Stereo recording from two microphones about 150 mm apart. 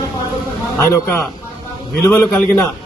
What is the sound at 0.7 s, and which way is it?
Speech, 20° left (ahead or behind).